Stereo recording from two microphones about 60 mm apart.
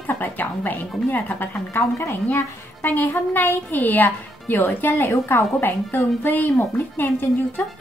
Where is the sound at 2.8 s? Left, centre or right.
Left.